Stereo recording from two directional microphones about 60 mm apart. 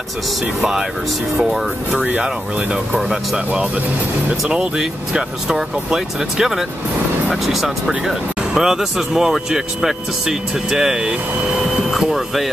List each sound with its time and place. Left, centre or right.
0.6 s speech: centre
2.0 s speech: centre
4.3 s speech: centre